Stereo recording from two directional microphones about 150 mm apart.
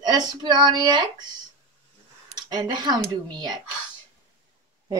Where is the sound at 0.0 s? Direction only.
30° right (ahead or behind).